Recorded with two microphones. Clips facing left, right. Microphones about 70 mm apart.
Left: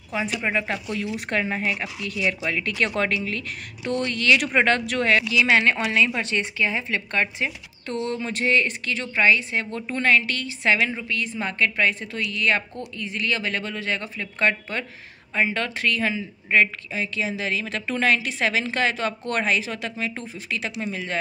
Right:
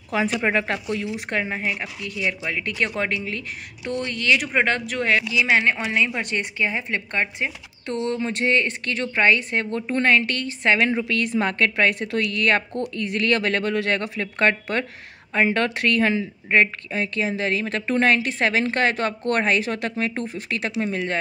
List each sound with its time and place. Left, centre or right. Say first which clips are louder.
0.3 s speech: right 3 dB; right
0.8 s speech: right 2 dB; right
1.3 s a woman's voice: left 1 dB; centre
4.4 s speech: left 1 dB; centre
4.6 s a woman's voice: left 1 dB; centre
8.8 s speech: right 1 dB; right
9.8 s speech: right 1 dB; right
10.9 s speech: right 6 dB; right